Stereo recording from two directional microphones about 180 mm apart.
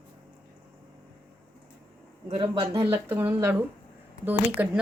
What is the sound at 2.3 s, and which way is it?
A woman's voice, 25° right (ahead or behind).